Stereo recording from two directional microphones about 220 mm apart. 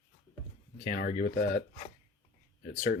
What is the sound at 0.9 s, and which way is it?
Speech, 35° left (ahead or behind).